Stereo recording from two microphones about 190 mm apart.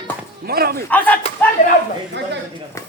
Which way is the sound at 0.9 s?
10° left (ahead or behind).